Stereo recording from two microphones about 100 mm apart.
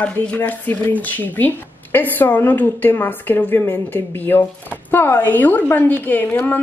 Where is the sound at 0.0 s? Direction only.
15° left (ahead or behind).